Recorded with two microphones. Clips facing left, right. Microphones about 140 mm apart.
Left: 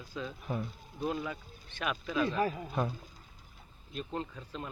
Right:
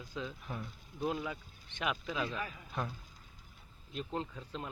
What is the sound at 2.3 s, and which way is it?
Speech, 40° left (ahead or behind).